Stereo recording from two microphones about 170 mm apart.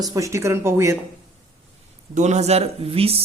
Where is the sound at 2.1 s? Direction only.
40° right (ahead or behind).